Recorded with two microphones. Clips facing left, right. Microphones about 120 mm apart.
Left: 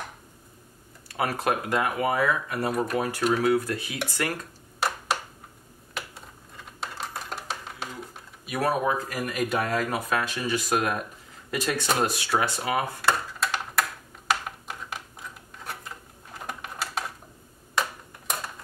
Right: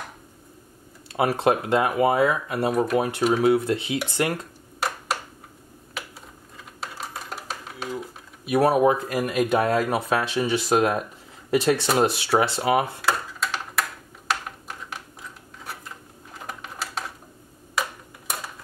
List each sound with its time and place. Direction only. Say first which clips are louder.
1.1 s speech: right 5 dB; 25° right (ahead or behind)
2.7 s speech: right 5 dB; centre (ahead or behind)
3.0 s speech: right 3 dB; 25° right (ahead or behind)
4.7 s a sound: even; centre (ahead or behind)
6.8 s typing: even; centre (ahead or behind)
8.5 s speech: right 7 dB; 25° right (ahead or behind)
13.0 s a sound: even; centre (ahead or behind)